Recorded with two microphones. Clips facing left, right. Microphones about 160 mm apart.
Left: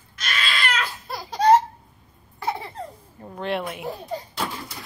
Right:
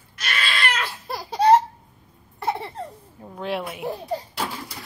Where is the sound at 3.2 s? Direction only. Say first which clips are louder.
Left 1 dB; 5° right (ahead or behind).